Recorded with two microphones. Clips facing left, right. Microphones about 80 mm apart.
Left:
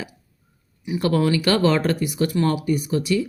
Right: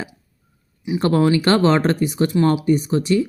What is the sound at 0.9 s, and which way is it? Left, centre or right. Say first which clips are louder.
Speech: right 3 dB; right.